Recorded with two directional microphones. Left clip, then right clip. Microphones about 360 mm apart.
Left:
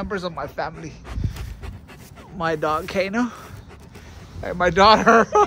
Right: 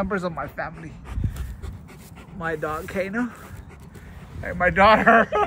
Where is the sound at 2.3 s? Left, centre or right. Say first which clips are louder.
Left 5 dB; centre.